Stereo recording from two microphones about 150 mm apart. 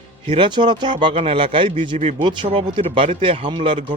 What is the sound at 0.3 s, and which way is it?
Speech, 35° right (ahead or behind).